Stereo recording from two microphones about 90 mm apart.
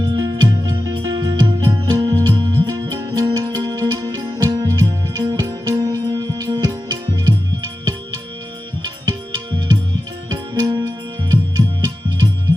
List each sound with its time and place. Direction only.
0.0 s music: 45° right (ahead or behind)
4.0 s music: 30° right (ahead or behind)
4.4 s music: 40° right (ahead or behind)
8.8 s tabla: 55° right (ahead or behind)
10.2 s music: 50° right (ahead or behind)
10.8 s music: 40° right (ahead or behind)